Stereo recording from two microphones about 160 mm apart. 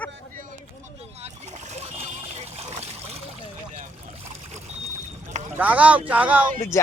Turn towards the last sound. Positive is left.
turn(degrees=20)  # may be behind; listen again after turning